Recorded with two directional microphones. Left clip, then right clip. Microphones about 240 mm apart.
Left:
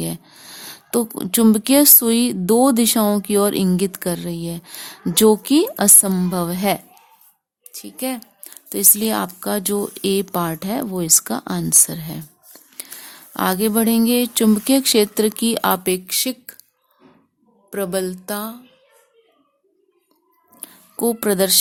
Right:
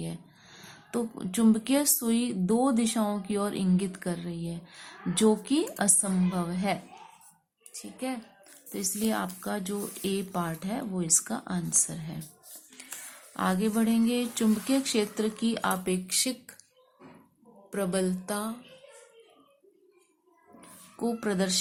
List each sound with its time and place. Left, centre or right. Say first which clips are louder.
0.0 s speech: left 12 dB; left
13.3 s speech: left 10 dB; left
17.7 s a woman's voice: left 7 dB; left
20.6 s a sound: left 11 dB; left